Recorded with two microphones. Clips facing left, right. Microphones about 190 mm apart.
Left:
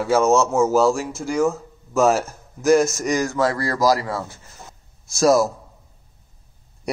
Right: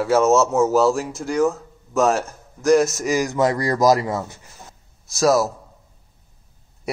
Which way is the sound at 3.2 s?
20° right (ahead or behind).